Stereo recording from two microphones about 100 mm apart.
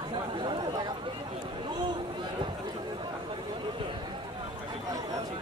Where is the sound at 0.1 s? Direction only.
55° right (ahead or behind).